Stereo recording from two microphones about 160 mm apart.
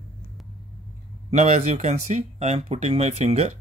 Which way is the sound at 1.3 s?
45° right (ahead or behind).